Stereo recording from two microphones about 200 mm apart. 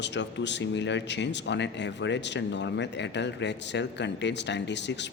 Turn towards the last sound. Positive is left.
turn(degrees=60)  # may be behind; listen again after turning